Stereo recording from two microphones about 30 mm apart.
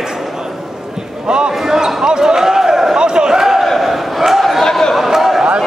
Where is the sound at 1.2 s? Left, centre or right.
Right.